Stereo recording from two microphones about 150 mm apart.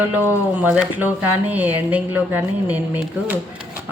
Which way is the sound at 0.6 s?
10° right (ahead or behind).